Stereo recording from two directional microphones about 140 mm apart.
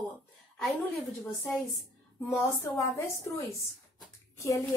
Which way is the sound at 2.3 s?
20° left (ahead or behind).